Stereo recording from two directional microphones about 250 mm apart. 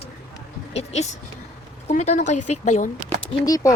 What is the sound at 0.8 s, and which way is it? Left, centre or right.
A woman's voice, left.